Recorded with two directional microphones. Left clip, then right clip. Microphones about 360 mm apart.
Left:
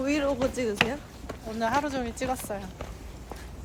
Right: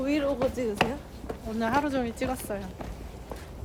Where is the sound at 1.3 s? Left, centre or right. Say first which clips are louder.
Left 1 dB; centre.